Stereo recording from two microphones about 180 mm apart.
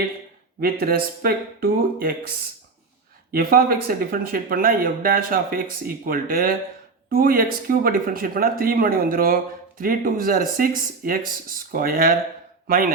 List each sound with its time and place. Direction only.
0.6 s speech: 55° right (ahead or behind)
3.3 s speech: 55° right (ahead or behind)